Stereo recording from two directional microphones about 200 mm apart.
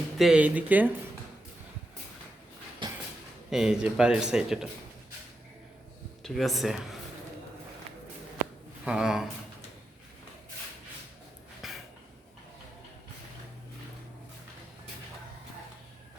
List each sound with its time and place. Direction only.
0.2 s speech: 5° right (ahead or behind)
2.8 s a sound: 25° right (ahead or behind)
3.5 s speech: 5° right (ahead or behind)
6.2 s speech: centre (ahead or behind)
8.8 s speech: 5° right (ahead or behind)
11.6 s a sound: centre (ahead or behind)